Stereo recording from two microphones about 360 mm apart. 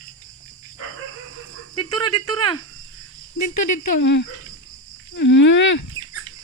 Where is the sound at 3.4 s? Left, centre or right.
Left.